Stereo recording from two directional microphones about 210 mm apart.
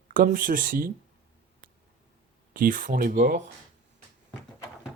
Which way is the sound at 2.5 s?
40° right (ahead or behind).